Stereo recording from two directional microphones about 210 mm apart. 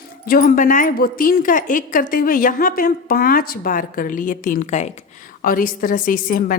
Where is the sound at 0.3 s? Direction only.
40° left (ahead or behind).